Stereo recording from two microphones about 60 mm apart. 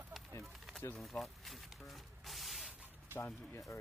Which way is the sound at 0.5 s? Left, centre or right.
Centre.